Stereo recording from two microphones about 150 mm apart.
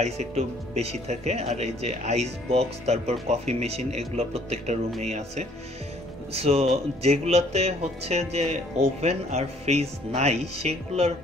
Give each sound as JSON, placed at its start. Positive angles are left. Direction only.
{"t": 0.0, "sound": "speech", "side_deg": -45}